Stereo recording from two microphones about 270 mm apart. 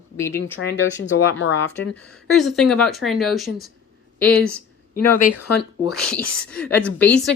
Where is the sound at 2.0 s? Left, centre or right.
Centre.